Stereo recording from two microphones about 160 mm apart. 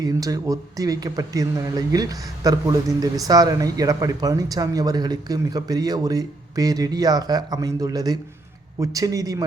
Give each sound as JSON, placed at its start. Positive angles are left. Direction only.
{"t": 0.0, "sound": "speech", "side_deg": -20}